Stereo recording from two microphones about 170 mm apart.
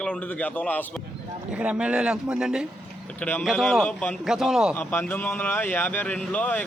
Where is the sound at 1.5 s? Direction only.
5° right (ahead or behind).